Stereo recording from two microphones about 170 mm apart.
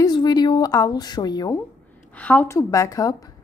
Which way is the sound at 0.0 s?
25° left (ahead or behind).